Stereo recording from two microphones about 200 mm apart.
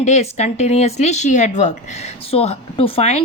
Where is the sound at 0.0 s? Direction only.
35° left (ahead or behind).